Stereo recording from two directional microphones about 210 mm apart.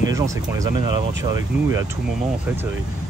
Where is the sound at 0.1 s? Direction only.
15° right (ahead or behind).